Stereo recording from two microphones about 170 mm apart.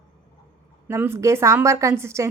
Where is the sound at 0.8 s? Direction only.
15° right (ahead or behind).